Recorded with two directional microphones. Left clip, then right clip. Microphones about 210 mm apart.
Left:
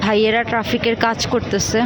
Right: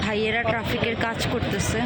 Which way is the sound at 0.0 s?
25° left (ahead or behind).